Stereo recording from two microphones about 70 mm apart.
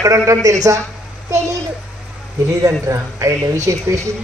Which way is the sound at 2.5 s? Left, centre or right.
Right.